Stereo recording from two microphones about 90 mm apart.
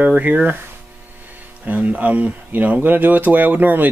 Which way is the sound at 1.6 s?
15° right (ahead or behind).